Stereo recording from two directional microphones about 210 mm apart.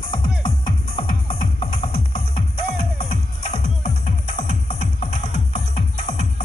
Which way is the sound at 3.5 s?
30° left (ahead or behind).